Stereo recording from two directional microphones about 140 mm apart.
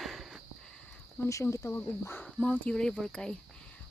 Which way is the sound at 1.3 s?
25° left (ahead or behind).